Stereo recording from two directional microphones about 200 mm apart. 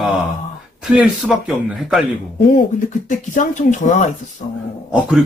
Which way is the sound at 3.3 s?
40° left (ahead or behind).